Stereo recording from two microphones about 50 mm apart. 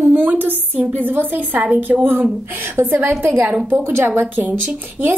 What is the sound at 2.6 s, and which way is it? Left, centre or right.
A woman's voice, right.